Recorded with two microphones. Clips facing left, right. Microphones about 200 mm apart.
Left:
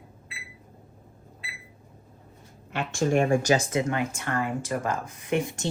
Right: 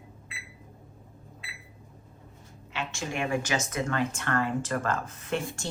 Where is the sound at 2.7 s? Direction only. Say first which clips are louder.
Left 10 dB; 50° left (ahead or behind); by 5.6 s 15° left (ahead or behind).